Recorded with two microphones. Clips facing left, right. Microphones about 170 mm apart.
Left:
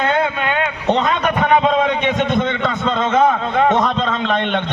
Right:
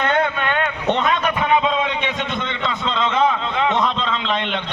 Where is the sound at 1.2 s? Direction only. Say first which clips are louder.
Left 3 dB; 45° left (ahead or behind).